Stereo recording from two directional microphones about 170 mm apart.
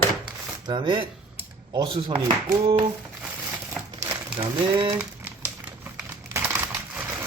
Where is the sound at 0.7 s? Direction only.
25° right (ahead or behind).